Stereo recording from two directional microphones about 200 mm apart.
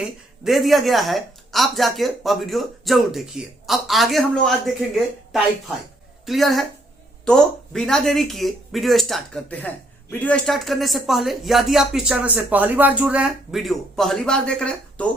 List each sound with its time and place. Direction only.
0.0 s a woman's voice: centre (ahead or behind)